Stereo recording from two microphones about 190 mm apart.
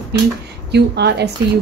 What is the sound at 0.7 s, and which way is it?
Speech, 60° right (ahead or behind).